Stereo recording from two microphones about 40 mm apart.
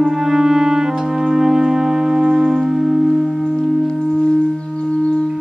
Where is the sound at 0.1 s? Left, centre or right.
Centre.